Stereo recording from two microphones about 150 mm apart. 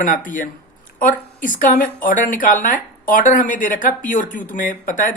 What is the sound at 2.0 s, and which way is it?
Speech, 60° left (ahead or behind).